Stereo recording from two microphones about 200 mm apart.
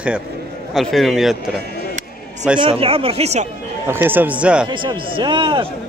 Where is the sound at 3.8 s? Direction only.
10° right (ahead or behind).